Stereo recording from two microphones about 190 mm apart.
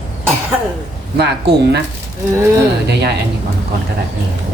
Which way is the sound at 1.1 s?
60° right (ahead or behind).